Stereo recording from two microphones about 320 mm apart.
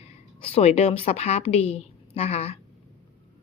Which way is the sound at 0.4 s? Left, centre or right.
Centre.